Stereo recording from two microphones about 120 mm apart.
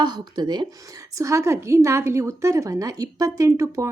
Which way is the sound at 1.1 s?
25° right (ahead or behind).